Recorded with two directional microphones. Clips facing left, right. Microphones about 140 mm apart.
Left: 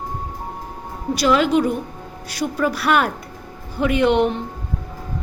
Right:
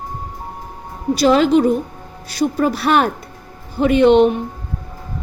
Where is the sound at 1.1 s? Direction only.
30° right (ahead or behind).